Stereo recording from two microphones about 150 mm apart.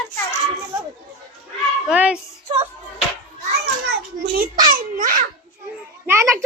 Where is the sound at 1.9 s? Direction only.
5° right (ahead or behind).